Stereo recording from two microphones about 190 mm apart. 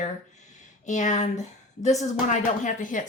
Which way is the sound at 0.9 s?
40° left (ahead or behind).